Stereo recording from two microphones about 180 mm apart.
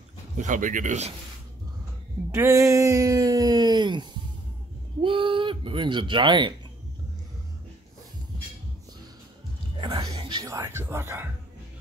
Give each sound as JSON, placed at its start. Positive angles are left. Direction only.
{"t": 0.4, "sound": "speech", "side_deg": -45}
{"t": 2.3, "sound": "speech", "side_deg": -15}
{"t": 9.8, "sound": "music", "side_deg": -25}